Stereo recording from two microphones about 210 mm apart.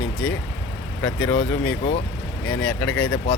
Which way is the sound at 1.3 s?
65° left (ahead or behind).